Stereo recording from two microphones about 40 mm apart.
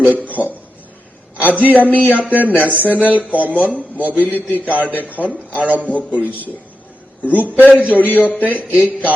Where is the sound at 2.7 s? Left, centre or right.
Right.